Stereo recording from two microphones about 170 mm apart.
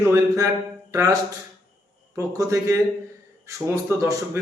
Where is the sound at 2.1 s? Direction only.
20° right (ahead or behind).